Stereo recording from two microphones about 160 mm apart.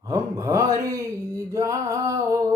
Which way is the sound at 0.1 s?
20° right (ahead or behind).